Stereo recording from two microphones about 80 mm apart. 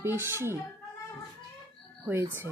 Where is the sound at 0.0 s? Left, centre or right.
Right.